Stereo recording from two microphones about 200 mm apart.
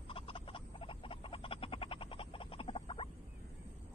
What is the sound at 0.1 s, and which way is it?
Frog, 25° left (ahead or behind).